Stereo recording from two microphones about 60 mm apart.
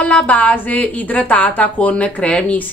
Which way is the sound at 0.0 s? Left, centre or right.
Left.